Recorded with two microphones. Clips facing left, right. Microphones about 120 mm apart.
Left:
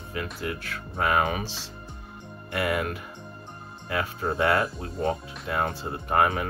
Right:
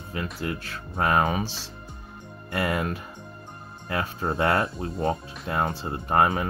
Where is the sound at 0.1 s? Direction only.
30° right (ahead or behind).